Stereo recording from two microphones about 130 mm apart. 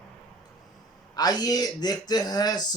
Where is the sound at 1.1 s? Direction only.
30° left (ahead or behind).